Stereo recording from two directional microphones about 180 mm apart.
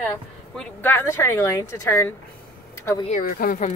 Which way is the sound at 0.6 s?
10° left (ahead or behind).